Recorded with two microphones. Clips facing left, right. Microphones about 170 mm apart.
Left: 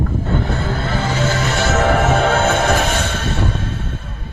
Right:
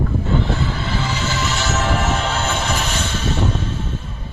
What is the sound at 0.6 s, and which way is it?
Music, 50° left (ahead or behind).